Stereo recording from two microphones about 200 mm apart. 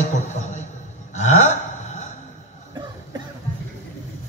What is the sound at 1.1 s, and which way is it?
Burping, 35° left (ahead or behind).